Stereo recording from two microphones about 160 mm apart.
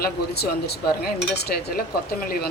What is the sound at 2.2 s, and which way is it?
Speech, 65° left (ahead or behind).